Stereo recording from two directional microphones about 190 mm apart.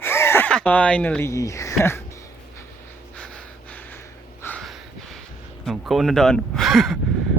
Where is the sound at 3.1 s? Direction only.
5° left (ahead or behind).